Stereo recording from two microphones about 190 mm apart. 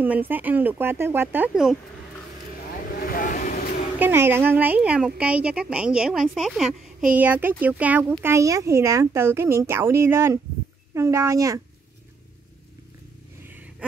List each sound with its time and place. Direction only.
0.0 s speech: 10° right (ahead or behind)
2.9 s vehicle: 45° left (ahead or behind)
4.0 s a woman's voice: 10° right (ahead or behind)
13.4 s a sound: 10° right (ahead or behind)